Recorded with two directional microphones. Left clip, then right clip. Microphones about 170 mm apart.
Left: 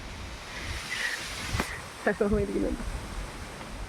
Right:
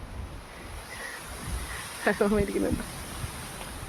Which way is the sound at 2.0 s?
40° right (ahead or behind).